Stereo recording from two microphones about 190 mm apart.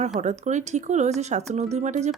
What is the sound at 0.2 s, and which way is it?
A woman's voice, 35° right (ahead or behind).